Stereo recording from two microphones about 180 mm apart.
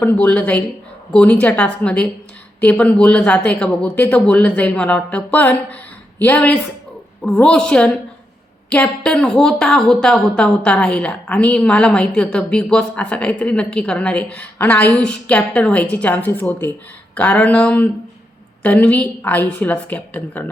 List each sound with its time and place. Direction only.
0.0 s a woman's voice: 10° left (ahead or behind)